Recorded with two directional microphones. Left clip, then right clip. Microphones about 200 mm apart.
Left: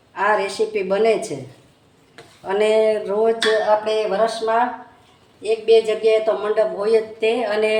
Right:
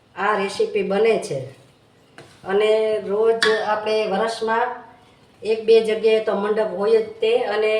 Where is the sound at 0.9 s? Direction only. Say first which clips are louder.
Left 2 dB; 35° left (ahead or behind).